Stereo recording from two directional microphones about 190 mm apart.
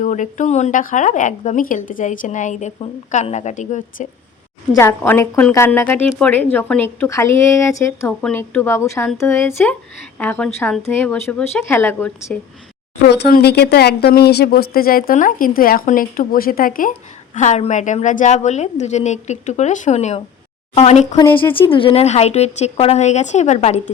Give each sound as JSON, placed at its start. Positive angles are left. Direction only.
{"t": 0.0, "sound": "a woman's voice", "side_deg": 40}
{"t": 4.7, "sound": "a woman's voice", "side_deg": 15}
{"t": 13.1, "sound": "a woman's voice", "side_deg": 60}